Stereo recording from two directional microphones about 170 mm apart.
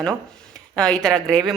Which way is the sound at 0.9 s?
25° right (ahead or behind).